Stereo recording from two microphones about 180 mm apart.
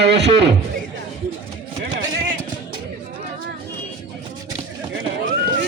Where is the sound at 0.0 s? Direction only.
70° right (ahead or behind).